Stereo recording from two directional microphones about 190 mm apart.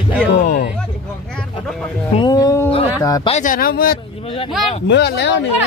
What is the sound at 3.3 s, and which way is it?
Speech, 40° left (ahead or behind).